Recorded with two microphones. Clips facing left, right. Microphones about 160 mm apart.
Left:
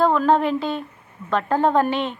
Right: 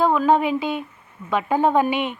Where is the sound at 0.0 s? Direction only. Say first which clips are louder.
Even; 5° right (ahead or behind).